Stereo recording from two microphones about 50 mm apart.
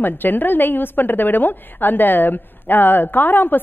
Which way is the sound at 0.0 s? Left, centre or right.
Left.